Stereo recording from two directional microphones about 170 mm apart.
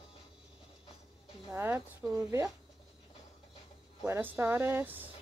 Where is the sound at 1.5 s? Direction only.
15° right (ahead or behind).